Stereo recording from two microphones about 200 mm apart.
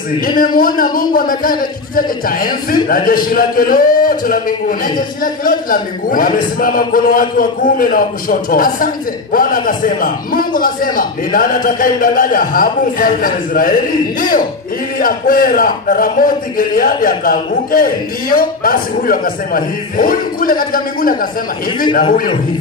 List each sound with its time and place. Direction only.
0.6 s a man's voice: 45° left (ahead or behind)
15.0 s a man's voice: 45° left (ahead or behind)